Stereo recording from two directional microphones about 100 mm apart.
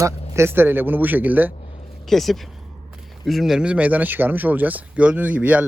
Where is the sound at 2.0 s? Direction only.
Centre (ahead or behind).